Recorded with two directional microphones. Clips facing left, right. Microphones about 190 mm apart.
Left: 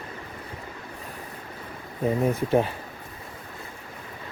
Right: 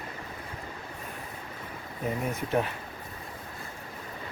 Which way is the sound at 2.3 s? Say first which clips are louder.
Left 4 dB; 30° left (ahead or behind).